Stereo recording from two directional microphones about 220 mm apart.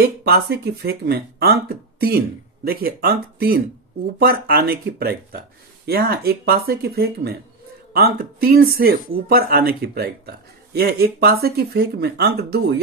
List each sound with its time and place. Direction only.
0.0 s speech: 45° right (ahead or behind)